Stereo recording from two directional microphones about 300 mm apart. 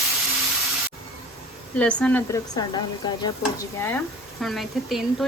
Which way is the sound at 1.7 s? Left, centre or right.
Centre.